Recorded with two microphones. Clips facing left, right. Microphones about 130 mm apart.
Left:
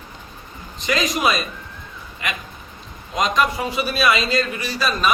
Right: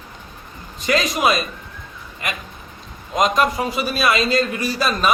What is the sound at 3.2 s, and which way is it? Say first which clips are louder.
A man's voice: right 2 dB; 40° right (ahead or behind).